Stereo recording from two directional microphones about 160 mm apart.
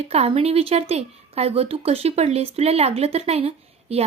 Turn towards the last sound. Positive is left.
turn(degrees=-40)  # may be behind; listen again after turning